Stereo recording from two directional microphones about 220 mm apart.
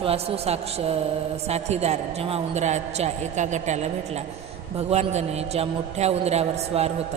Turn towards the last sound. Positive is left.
turn(degrees=-30)  # may be behind; listen again after turning